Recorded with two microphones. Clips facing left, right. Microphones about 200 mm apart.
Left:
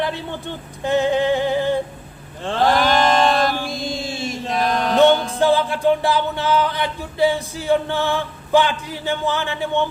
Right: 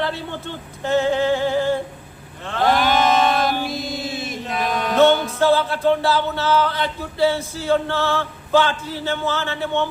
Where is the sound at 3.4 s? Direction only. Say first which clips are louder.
Even; 5° right (ahead or behind).